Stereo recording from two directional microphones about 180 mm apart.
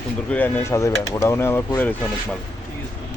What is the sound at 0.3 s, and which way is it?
Speech, 10° left (ahead or behind).